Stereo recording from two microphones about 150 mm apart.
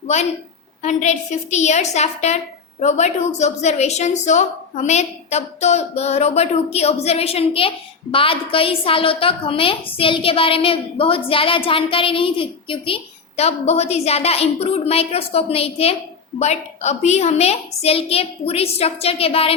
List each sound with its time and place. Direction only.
0.8 s a woman's voice: 50° left (ahead or behind)